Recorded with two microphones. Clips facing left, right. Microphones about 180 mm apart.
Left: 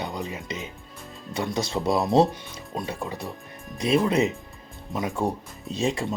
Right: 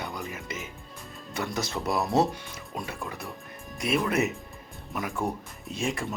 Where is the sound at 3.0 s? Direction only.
20° left (ahead or behind).